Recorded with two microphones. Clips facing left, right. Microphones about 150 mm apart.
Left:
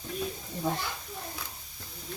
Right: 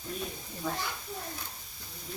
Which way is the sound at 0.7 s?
25° left (ahead or behind).